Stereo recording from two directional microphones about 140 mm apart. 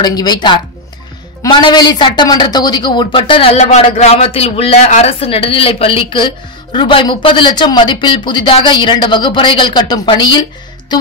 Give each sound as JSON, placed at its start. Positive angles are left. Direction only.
{"t": 0.0, "sound": "a woman's voice", "side_deg": 30}